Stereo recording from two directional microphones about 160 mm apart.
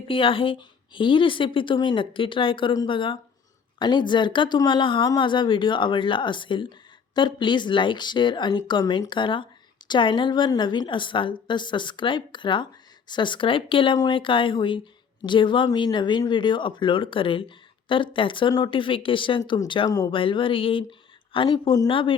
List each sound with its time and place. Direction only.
0.1 s a woman's voice: 35° left (ahead or behind)